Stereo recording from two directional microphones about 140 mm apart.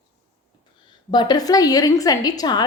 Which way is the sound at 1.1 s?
30° left (ahead or behind).